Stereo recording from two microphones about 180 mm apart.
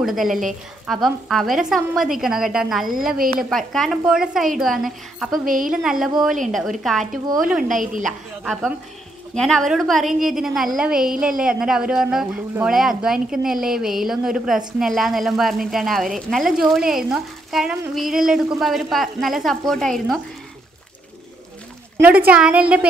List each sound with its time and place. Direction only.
0.0 s speech: centre (ahead or behind)
5.4 s speech: 50° right (ahead or behind)
5.7 s speech: centre (ahead or behind)
7.6 s speech: 45° right (ahead or behind)
9.3 s speech: 5° left (ahead or behind)
22.0 s a woman's voice: 10° right (ahead or behind)